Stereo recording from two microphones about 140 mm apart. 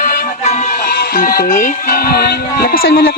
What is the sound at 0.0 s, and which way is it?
Music, 70° left (ahead or behind).